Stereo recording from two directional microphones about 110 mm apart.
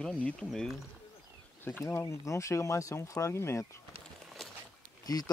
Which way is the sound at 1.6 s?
20° left (ahead or behind).